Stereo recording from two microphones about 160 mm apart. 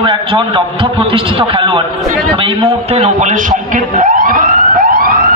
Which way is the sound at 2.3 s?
35° right (ahead or behind).